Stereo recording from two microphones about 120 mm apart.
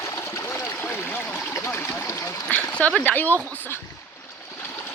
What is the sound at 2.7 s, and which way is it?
Speech, 10° left (ahead or behind).